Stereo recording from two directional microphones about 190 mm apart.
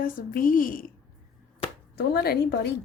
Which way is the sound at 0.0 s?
45° left (ahead or behind).